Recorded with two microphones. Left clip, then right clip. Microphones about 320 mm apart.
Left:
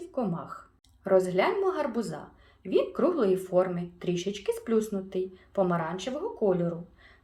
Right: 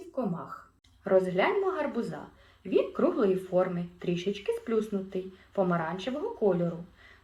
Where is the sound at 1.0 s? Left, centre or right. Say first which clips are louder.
Left 1 dB; left.